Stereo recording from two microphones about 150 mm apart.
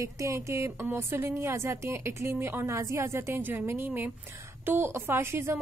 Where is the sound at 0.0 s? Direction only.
20° right (ahead or behind).